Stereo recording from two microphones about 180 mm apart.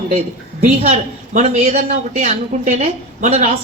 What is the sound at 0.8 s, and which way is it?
A woman's voice, 40° right (ahead or behind).